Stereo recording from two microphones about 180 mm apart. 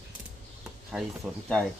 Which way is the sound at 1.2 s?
5° right (ahead or behind).